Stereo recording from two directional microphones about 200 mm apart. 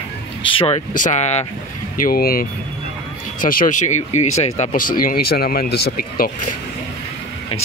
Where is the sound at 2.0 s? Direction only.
45° left (ahead or behind).